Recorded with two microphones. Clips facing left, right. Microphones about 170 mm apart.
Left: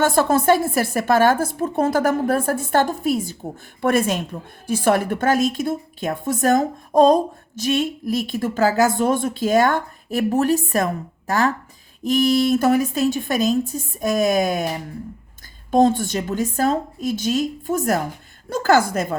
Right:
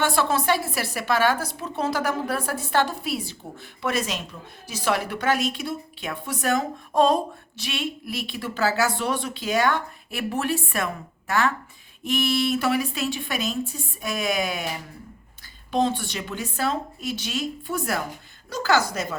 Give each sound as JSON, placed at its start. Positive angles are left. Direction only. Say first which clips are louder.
{"t": 0.0, "sound": "a woman's voice", "louder": "left 6 dB", "side_deg": 45}
{"t": 15.7, "sound": "a woman's voice", "louder": "left 7 dB", "side_deg": 45}